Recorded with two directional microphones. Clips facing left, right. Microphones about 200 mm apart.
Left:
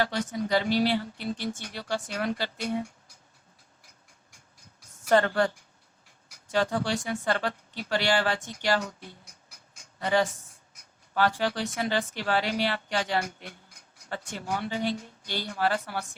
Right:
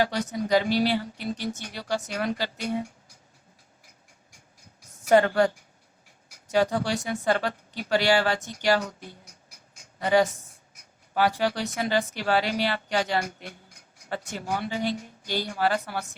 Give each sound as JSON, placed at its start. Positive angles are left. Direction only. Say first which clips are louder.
{"t": 0.4, "sound": "speech", "louder": "right 2 dB", "side_deg": -15}
{"t": 5.0, "sound": "speech", "louder": "right 3 dB", "side_deg": -15}